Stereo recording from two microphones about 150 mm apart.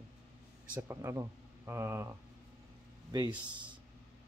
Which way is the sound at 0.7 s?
15° right (ahead or behind).